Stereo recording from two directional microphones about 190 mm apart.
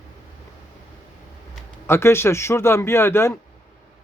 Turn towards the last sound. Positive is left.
turn(degrees=15)  # may be behind; listen again after turning